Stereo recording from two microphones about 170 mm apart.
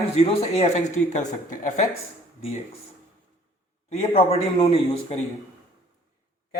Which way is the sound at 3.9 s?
35° left (ahead or behind).